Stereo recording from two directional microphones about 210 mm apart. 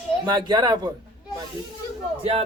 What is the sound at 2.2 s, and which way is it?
Speech, 30° right (ahead or behind).